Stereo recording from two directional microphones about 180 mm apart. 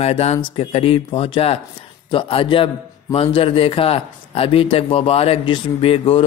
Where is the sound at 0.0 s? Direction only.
35° left (ahead or behind).